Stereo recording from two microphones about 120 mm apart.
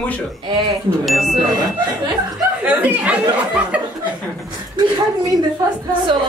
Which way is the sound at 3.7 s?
10° right (ahead or behind).